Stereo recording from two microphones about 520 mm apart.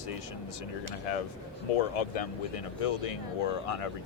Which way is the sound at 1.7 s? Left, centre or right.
Left.